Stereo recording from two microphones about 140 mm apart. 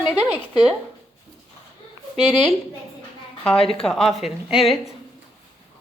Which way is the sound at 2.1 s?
5° right (ahead or behind).